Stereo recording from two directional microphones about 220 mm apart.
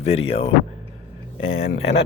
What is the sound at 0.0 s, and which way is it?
Speech, 25° left (ahead or behind).